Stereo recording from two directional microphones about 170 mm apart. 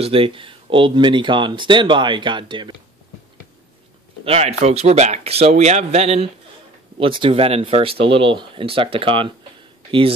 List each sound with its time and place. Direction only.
0.0 s speech: 35° right (ahead or behind)
4.2 s speech: 35° right (ahead or behind)